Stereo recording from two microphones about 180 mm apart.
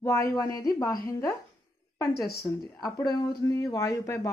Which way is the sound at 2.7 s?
20° left (ahead or behind).